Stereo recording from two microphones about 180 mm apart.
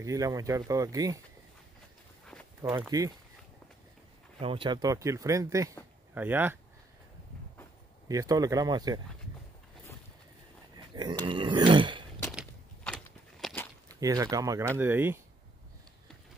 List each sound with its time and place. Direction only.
0.0 s speech: 20° right (ahead or behind)
2.2 s walk: 5° left (ahead or behind)
2.9 s speech: 20° right (ahead or behind)
4.4 s speech: 30° right (ahead or behind); by 6.6 s 10° right (ahead or behind)
8.1 s speech: 20° right (ahead or behind)
11.2 s a sound: 25° right (ahead or behind)
12.3 s a sound: centre (ahead or behind)
13.8 s speech: 20° right (ahead or behind)